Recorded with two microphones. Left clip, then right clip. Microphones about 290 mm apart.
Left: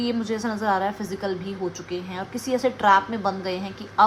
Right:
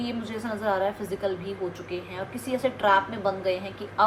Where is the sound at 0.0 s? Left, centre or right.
Left.